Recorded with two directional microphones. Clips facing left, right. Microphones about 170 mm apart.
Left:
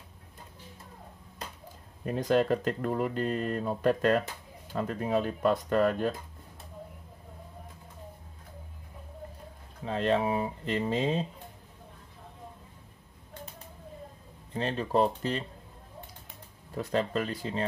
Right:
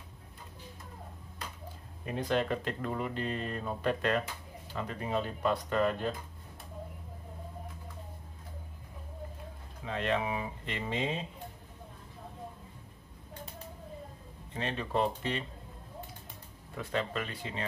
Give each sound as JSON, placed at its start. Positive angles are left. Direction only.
{"t": 2.0, "sound": "speech", "side_deg": 40}
{"t": 9.8, "sound": "speech", "side_deg": 35}
{"t": 14.5, "sound": "speech", "side_deg": 35}
{"t": 16.7, "sound": "speech", "side_deg": 40}